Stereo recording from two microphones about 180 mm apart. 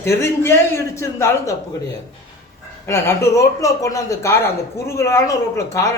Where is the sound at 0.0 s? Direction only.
15° left (ahead or behind).